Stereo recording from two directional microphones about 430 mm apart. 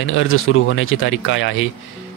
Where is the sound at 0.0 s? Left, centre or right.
Left.